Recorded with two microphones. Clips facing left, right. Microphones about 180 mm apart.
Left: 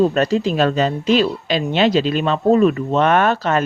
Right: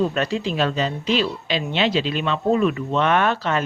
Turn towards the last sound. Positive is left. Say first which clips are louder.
# left 4 dB
turn(degrees=45)  # may be behind; listen again after turning